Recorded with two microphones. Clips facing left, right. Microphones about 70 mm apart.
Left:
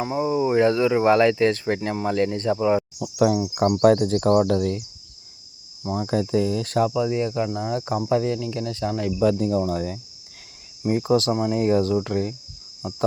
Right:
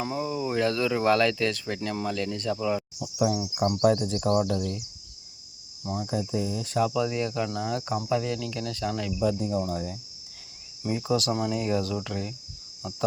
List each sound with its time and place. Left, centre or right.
0.2 s speech: left
3.0 s speech: left
3.8 s speech: left
5.8 s cricket: left
6.1 s speech: left
6.8 s cricket: left
7.9 s speech: left
9.2 s speech: left
11.0 s speech: left
12.8 s cricket: left